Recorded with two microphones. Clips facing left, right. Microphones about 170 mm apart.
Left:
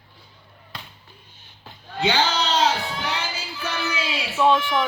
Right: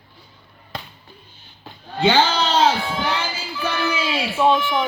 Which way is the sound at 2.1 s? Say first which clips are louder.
Right 5 dB; 50° right (ahead or behind).